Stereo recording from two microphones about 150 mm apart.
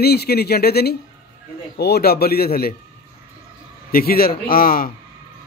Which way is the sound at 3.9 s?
80° left.